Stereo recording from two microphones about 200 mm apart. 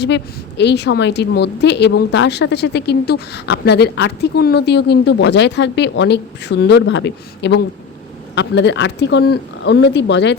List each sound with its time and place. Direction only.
0.0 s a woman's voice: 60° left (ahead or behind)